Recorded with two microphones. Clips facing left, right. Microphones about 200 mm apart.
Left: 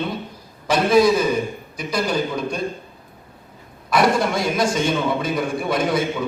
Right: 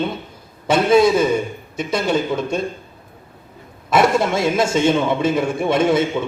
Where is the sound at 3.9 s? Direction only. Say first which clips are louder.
Right 2 dB; 25° right (ahead or behind).